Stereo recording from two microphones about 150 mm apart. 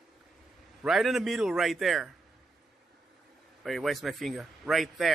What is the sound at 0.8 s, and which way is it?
A man's voice, 5° right (ahead or behind).